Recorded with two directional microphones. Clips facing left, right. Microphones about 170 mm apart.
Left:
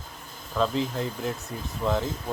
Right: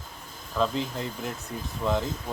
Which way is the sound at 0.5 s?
Centre (ahead or behind).